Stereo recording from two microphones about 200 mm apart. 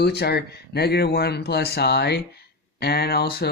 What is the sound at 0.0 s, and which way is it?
Speech, 55° left (ahead or behind).